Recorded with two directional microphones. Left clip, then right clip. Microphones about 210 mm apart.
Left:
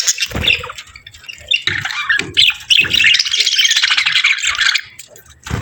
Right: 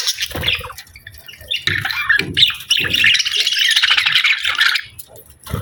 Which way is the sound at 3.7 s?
10° right (ahead or behind).